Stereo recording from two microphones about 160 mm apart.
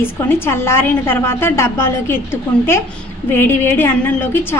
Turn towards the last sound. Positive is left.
turn(degrees=15)  # may be behind; listen again after turning